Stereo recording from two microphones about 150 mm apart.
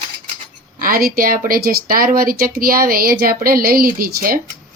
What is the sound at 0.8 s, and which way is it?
Speech, 75° right (ahead or behind).